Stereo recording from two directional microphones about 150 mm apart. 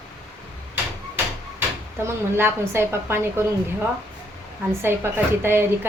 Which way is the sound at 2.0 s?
15° right (ahead or behind).